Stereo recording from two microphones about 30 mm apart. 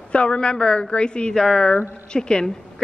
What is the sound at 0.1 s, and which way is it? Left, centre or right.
A woman's voice, left.